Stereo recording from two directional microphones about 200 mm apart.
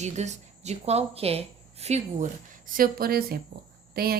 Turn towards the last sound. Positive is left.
turn(degrees=-50)  # may be behind; listen again after turning